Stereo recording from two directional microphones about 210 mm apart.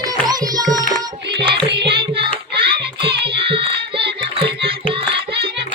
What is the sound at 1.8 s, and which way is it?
Child singing, 25° right (ahead or behind).